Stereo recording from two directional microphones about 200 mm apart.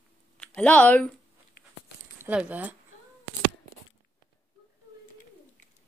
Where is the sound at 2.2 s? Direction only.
5° right (ahead or behind).